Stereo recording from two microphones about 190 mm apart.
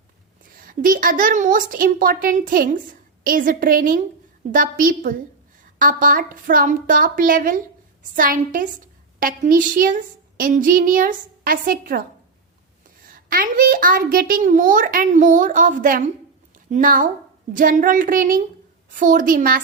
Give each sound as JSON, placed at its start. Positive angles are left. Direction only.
{"t": 0.5, "sound": "a woman's voice", "side_deg": -45}
{"t": 13.1, "sound": "a woman's voice", "side_deg": -45}